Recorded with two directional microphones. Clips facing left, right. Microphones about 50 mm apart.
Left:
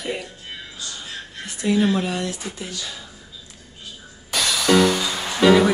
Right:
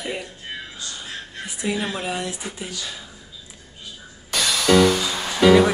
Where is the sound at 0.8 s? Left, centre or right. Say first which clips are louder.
Even; centre.